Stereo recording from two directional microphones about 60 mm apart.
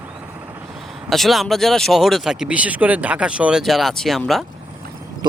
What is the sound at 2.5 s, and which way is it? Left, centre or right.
Speech, right.